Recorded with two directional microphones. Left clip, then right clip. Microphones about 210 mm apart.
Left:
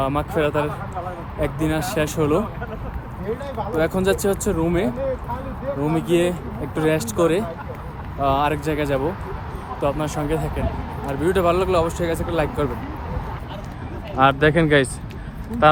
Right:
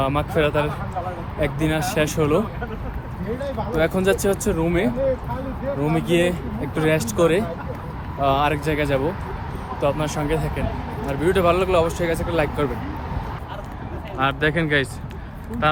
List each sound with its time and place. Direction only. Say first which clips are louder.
0.0 s speech: right 1 dB; 15° left (ahead or behind)
3.7 s speech: even; 15° left (ahead or behind)
14.2 s speech: left 5 dB; centre (ahead or behind)